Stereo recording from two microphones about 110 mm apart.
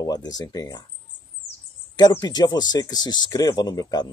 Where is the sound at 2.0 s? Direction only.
35° left (ahead or behind).